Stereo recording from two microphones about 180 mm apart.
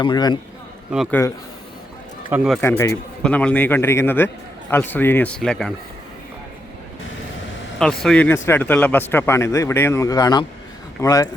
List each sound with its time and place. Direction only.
0.0 s a man's voice: 25° left (ahead or behind)
2.3 s speech: 5° right (ahead or behind)
2.6 s speech: 15° left (ahead or behind)
7.8 s a man's voice: 5° left (ahead or behind); by 11.3 s 20° left (ahead or behind)